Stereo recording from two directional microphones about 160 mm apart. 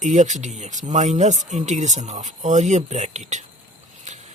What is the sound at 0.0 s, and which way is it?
Speech, 50° right (ahead or behind).